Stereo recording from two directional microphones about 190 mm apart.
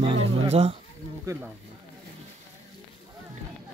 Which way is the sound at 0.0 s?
30° right (ahead or behind).